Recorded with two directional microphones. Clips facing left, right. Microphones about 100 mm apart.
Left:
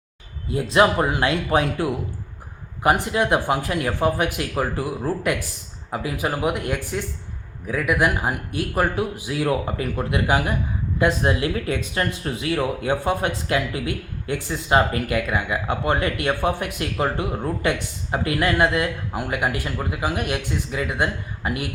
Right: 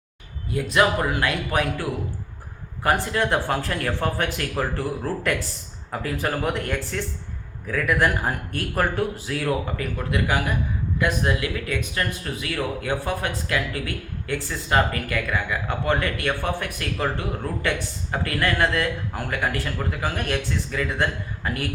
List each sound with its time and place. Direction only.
0.4 s speech: 25° left (ahead or behind)